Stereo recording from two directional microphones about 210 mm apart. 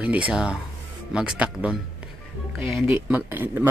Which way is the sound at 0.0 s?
5° right (ahead or behind).